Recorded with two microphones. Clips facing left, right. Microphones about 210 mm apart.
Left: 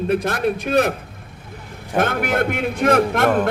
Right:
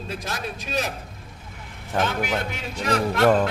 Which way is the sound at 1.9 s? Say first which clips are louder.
Left 5 dB; 55° left (ahead or behind).